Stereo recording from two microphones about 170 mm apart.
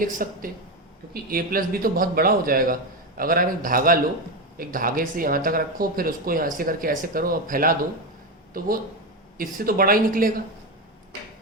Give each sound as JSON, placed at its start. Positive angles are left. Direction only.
{"t": 0.0, "sound": "speech", "side_deg": -55}